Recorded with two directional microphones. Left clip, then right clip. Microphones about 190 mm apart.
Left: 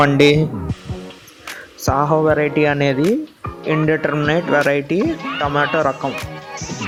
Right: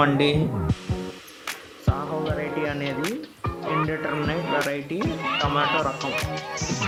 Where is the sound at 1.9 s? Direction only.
50° left (ahead or behind).